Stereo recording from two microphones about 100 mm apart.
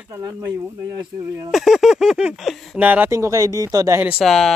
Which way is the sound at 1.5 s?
Centre (ahead or behind).